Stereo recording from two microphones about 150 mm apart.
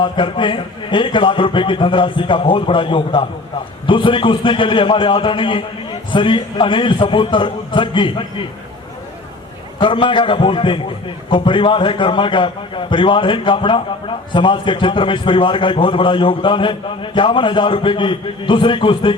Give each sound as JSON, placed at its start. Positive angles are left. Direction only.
{"t": 0.0, "sound": "a man's voice", "side_deg": 35}
{"t": 9.8, "sound": "a man's voice", "side_deg": 35}